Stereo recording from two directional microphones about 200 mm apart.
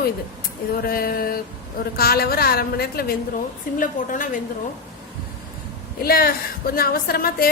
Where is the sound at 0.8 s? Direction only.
50° left (ahead or behind).